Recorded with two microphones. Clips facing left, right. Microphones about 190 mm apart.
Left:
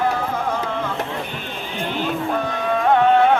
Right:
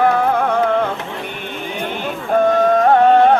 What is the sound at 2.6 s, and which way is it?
Music, 45° right (ahead or behind).